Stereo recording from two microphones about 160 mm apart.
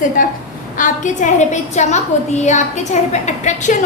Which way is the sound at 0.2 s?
55° left (ahead or behind).